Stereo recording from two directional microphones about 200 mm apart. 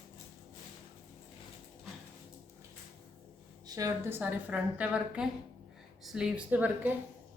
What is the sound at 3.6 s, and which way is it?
A woman's voice, 15° right (ahead or behind).